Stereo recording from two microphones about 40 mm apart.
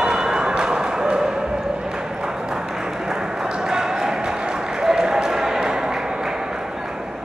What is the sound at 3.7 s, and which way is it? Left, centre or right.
Basketball bounce, centre.